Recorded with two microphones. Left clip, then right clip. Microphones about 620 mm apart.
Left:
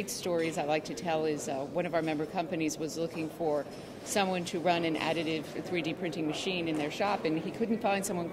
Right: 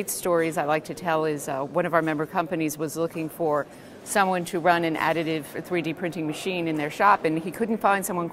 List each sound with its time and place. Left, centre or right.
0.2 s a woman's voice: right